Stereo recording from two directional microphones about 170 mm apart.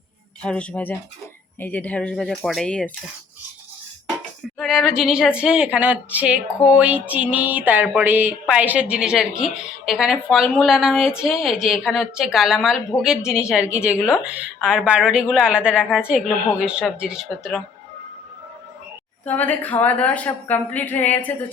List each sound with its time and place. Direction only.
0.4 s a woman's voice: 5° left (ahead or behind)
4.6 s a woman's voice: centre (ahead or behind)
19.3 s a woman's voice: 10° left (ahead or behind)